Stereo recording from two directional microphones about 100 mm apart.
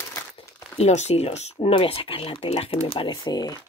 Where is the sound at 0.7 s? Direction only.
90° left; by 3.1 s 70° left (ahead or behind).